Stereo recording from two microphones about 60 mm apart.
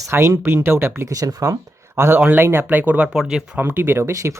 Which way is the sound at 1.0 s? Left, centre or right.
Right.